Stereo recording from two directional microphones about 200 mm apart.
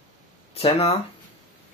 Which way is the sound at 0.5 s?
30° left (ahead or behind).